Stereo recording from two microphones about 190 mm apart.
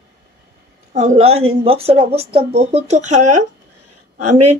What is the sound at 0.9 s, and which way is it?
Speech, 35° right (ahead or behind).